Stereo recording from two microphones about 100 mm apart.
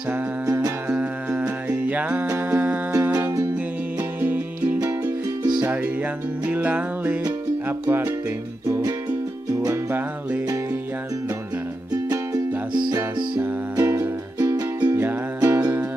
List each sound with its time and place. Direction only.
0.5 s music: 35° right (ahead or behind)
0.8 s music: 10° right (ahead or behind)
3.1 s music: 30° right (ahead or behind)
4.2 s music: 20° right (ahead or behind)
6.5 s music: 15° right (ahead or behind)
7.6 s speech: 25° right (ahead or behind)
8.6 s music: 30° right (ahead or behind)
9.8 s music: 20° right (ahead or behind)
13.7 s music: 30° right (ahead or behind)